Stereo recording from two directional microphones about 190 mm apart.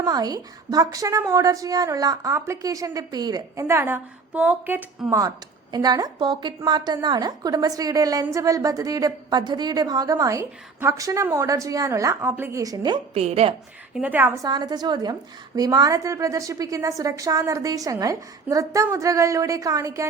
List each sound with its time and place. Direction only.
0.0 s a woman's voice: 20° right (ahead or behind)
5.7 s a woman's voice: 20° right (ahead or behind)
13.9 s a woman's voice: 10° right (ahead or behind)